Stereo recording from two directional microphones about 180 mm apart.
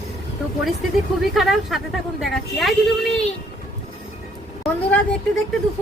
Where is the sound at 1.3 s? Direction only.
Centre (ahead or behind).